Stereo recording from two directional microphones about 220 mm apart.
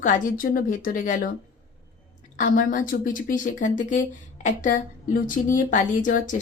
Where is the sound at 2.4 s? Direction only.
35° left (ahead or behind).